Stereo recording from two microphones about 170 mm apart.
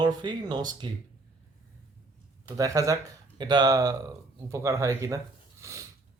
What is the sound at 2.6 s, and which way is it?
Speech, 20° right (ahead or behind).